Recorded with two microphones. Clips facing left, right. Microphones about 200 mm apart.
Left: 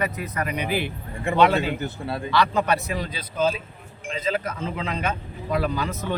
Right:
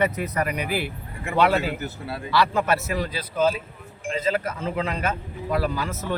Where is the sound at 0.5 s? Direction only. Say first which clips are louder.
Left 1 dB; 10° right (ahead or behind).